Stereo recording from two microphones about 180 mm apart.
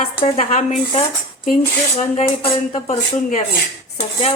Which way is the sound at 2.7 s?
35° left (ahead or behind).